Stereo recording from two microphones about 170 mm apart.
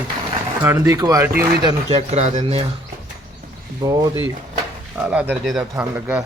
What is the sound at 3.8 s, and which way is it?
Speech, 25° right (ahead or behind).